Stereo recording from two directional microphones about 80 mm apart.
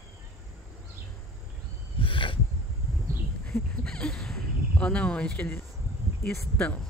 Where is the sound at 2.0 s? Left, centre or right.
Left.